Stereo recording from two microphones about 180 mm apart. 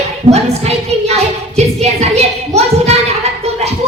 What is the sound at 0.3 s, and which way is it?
Music, 35° right (ahead or behind).